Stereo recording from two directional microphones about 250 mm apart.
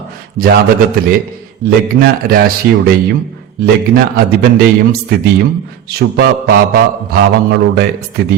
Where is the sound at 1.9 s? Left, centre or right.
Right.